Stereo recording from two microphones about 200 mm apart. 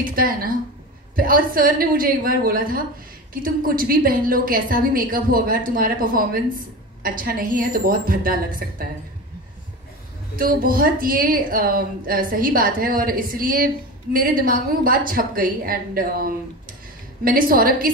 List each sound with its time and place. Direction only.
0.0 s a woman's voice: 45° right (ahead or behind)
10.3 s a woman's voice: 45° right (ahead or behind)